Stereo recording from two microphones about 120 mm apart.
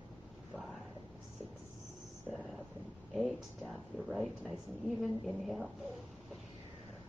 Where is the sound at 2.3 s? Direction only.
Centre (ahead or behind).